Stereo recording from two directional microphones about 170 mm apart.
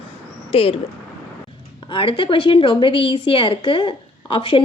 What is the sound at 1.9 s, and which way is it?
A woman's voice, 30° left (ahead or behind).